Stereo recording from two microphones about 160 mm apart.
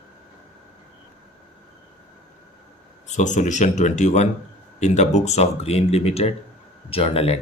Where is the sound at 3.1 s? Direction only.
50° left (ahead or behind).